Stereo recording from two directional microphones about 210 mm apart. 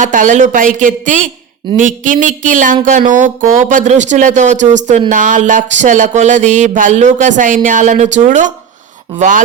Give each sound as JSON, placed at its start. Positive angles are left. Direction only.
{"t": 0.0, "sound": "speech", "side_deg": -35}